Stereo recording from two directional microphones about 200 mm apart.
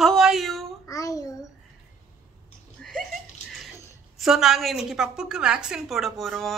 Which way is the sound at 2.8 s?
5° left (ahead or behind).